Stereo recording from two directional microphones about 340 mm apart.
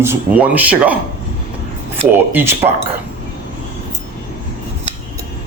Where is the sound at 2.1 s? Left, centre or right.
Centre.